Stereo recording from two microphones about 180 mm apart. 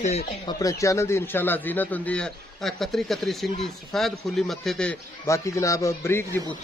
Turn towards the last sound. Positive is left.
turn(degrees=15)  # may be behind; listen again after turning